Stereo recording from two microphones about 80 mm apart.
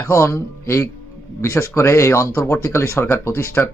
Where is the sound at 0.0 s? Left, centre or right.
Left.